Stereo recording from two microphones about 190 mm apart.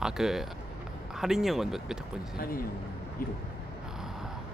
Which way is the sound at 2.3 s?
50° left (ahead or behind).